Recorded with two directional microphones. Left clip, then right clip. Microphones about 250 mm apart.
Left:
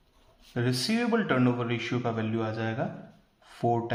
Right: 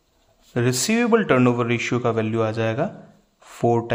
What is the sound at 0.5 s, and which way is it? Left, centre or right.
A man's voice, right.